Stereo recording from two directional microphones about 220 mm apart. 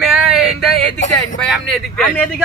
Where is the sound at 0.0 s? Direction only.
5° right (ahead or behind).